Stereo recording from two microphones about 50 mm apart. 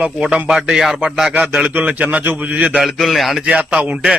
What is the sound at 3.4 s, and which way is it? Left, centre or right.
Speech, right.